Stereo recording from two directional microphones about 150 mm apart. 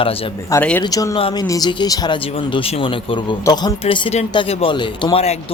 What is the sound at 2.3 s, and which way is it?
Speech, 40° left (ahead or behind).